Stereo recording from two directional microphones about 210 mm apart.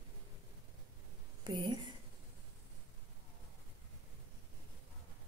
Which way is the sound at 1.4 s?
20° right (ahead or behind).